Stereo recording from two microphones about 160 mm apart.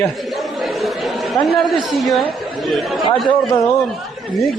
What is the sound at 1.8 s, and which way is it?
A man's voice, centre (ahead or behind).